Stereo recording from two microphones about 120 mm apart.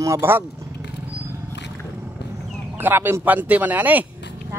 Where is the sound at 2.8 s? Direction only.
20° right (ahead or behind).